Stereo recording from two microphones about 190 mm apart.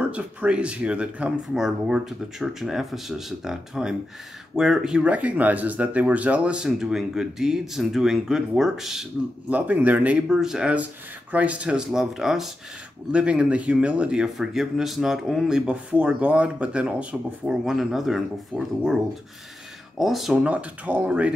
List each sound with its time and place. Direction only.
0.0 s speech: 5° right (ahead or behind)
20.0 s speech: centre (ahead or behind)